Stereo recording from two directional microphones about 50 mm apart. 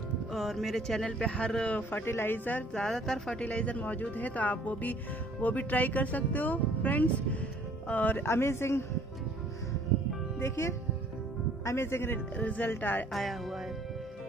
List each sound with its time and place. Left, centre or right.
0.3 s speech: centre; by 1.5 s left
1.9 s speech: left
2.7 s a woman's voice: centre
3.3 s speech: left
8.3 s a man's voice: left
10.4 s a man's voice: left
12.4 s speech: left
13.1 s speech: centre